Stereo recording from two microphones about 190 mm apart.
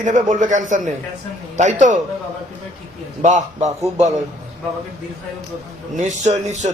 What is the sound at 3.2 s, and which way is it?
Speech, 40° right (ahead or behind).